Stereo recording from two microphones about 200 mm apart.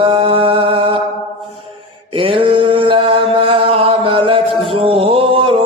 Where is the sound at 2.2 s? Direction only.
25° right (ahead or behind).